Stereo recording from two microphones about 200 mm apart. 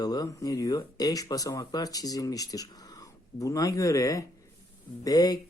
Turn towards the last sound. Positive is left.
turn(degrees=20)  # may be behind; listen again after turning